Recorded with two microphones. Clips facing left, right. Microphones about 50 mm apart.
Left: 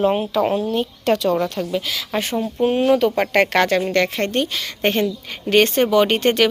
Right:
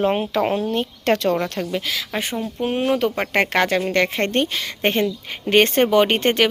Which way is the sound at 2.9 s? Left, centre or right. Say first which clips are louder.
Left 4 dB; centre.